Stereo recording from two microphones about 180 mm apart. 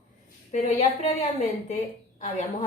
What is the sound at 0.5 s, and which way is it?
A woman's voice, 40° left (ahead or behind).